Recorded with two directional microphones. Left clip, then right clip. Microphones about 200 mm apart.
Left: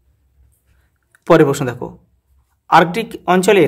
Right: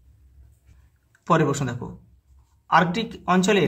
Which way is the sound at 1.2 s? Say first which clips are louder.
Left 10 dB; 45° left (ahead or behind).